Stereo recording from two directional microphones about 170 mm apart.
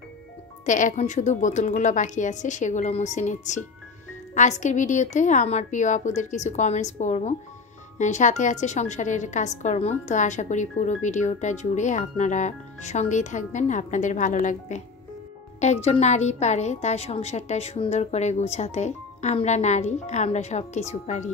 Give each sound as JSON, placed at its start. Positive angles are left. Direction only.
{"t": 0.7, "sound": "a woman's voice", "side_deg": 45}